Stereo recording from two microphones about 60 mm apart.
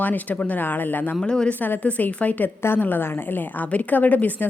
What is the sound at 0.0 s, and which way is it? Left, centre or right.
Speech, left.